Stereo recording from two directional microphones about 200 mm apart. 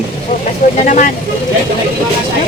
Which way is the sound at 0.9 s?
40° left (ahead or behind).